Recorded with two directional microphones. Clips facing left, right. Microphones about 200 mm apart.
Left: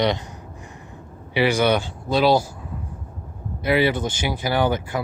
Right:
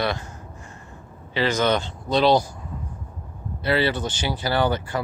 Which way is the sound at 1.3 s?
10° left (ahead or behind).